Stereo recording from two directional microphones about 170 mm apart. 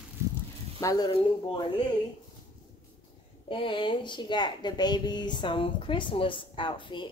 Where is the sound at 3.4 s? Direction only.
30° left (ahead or behind).